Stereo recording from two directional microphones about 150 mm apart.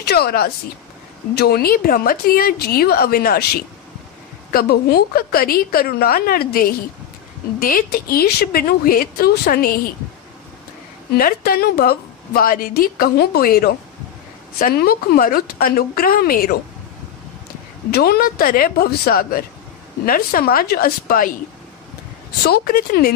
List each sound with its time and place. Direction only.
0.0 s a woman's voice: 90° left
4.5 s a woman's voice: 85° left
11.1 s a woman's voice: 85° left
17.9 s a woman's voice: 90° left
20.1 s a woman's voice: 75° left (ahead or behind)
22.4 s a woman's voice: 90° left